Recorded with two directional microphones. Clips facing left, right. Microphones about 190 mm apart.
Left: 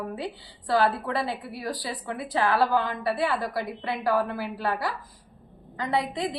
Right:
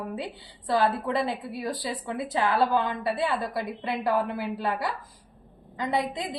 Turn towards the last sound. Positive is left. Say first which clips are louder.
# left 1 dB
turn(degrees=-20)  # may be behind; listen again after turning